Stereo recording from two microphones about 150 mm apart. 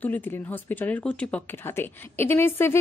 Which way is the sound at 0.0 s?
10° left (ahead or behind).